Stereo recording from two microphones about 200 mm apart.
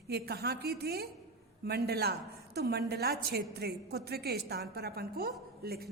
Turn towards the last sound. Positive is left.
turn(degrees=-50)  # may be behind; listen again after turning